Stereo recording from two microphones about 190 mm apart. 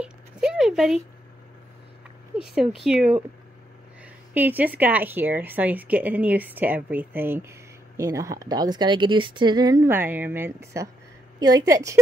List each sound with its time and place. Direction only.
0.0 s zipper: 5° right (ahead or behind)
2.3 s speech: centre (ahead or behind)
4.3 s a woman's voice: 10° right (ahead or behind)